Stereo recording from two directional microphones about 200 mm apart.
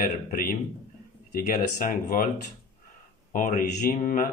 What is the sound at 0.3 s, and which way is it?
Speech, 40° left (ahead or behind).